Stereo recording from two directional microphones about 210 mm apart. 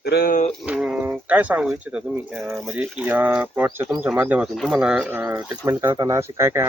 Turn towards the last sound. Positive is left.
turn(degrees=-10)  # may be behind; listen again after turning